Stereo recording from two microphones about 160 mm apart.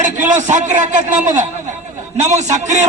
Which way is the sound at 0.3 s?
50° right (ahead or behind).